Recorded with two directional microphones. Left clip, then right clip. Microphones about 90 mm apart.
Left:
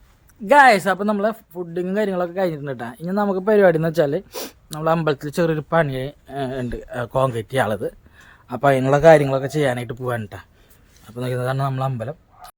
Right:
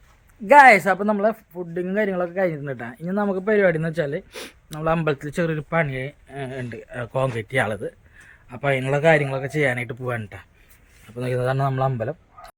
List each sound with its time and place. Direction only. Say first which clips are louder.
0.4 s speech: right 1 dB; centre (ahead or behind)
2.6 s speech: left 2 dB; 15° left (ahead or behind)
3.4 s speech: left 5 dB; 35° left (ahead or behind)
4.7 s speech: left 3 dB; 15° left (ahead or behind)
8.5 s speech: left 6 dB; 45° left (ahead or behind)
9.5 s speech: left 1 dB; 25° left (ahead or behind)
11.3 s a man's voice: right 2 dB; 15° right (ahead or behind)